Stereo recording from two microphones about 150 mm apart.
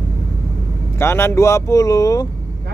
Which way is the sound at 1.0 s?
15° left (ahead or behind).